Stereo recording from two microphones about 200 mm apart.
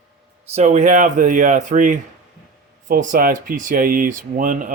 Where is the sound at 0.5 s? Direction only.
35° right (ahead or behind).